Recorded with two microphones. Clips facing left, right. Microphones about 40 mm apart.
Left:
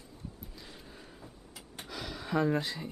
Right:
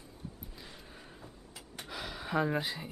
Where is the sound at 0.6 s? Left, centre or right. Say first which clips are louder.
Left 1 dB; centre.